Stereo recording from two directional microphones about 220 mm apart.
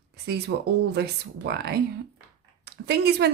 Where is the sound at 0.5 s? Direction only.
45° right (ahead or behind).